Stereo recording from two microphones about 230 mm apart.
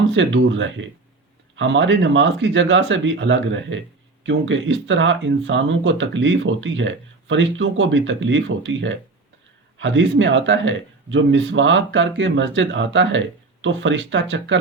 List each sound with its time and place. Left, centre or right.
0.1 s speech: right